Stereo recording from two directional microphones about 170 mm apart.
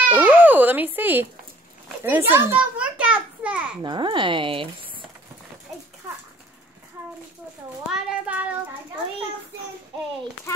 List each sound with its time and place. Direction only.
0.1 s a child's voice: 10° right (ahead or behind)
3.8 s speech: 25° right (ahead or behind)
7.9 s a child's voice: 5° right (ahead or behind)